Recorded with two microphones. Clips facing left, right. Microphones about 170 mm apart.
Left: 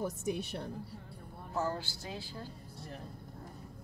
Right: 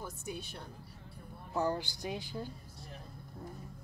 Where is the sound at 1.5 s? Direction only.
15° right (ahead or behind).